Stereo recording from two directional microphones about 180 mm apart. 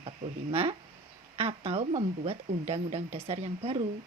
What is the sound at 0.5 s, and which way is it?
Speech, 30° right (ahead or behind).